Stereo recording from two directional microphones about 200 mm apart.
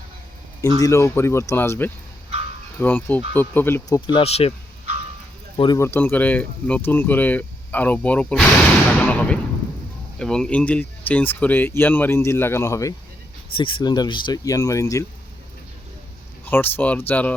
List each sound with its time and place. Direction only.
0.8 s speech: 15° left (ahead or behind); by 4.5 s 30° left (ahead or behind)
5.5 s speech: 20° left (ahead or behind)
13.5 s speech: 25° left (ahead or behind)
16.5 s speech: 10° left (ahead or behind)